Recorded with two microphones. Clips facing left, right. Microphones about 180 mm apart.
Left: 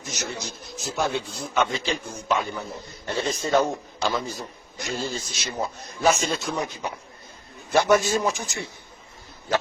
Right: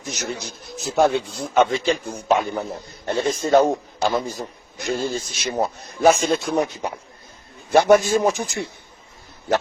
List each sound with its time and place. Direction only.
0.3 s a man's voice: 55° right (ahead or behind)
7.7 s a man's voice: 55° right (ahead or behind)